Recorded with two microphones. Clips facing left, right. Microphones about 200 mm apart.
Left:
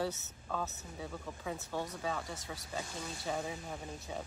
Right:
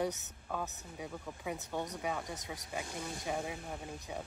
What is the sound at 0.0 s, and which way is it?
Speech, 15° right (ahead or behind).